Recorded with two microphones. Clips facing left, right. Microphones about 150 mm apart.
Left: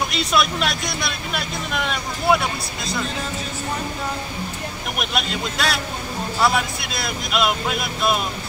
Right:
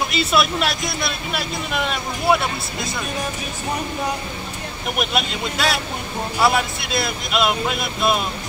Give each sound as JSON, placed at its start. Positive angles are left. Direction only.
{"t": 0.1, "sound": "speech", "side_deg": 0}
{"t": 4.9, "sound": "speech", "side_deg": 0}